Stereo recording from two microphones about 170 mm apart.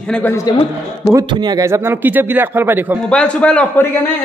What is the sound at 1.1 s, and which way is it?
A man's voice, 25° right (ahead or behind).